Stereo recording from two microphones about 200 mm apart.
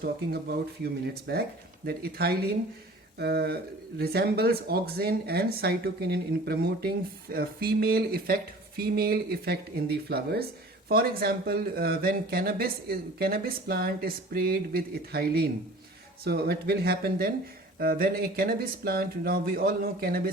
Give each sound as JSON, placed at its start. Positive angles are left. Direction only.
{"t": 0.0, "sound": "speech", "side_deg": -50}